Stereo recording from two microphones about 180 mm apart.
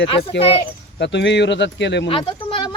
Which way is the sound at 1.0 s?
75° left (ahead or behind).